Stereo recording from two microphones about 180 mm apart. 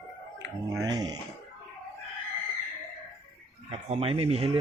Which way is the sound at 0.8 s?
20° right (ahead or behind).